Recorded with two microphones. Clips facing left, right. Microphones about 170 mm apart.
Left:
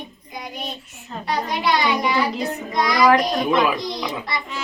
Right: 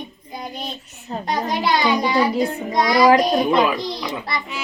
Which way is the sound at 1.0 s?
40° right (ahead or behind).